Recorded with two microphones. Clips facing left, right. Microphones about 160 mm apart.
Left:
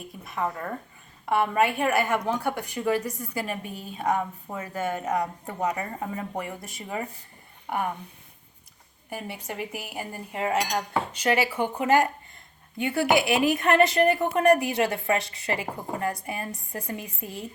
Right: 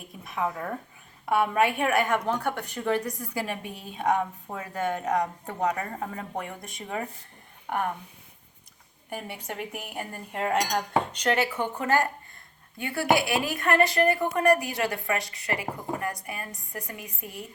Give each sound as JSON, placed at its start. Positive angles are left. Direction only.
{"t": 0.3, "sound": "a woman's voice", "side_deg": 0}
{"t": 9.0, "sound": "a woman's voice", "side_deg": 0}